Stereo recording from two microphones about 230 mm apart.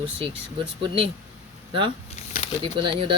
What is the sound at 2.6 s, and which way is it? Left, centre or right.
Speech, right.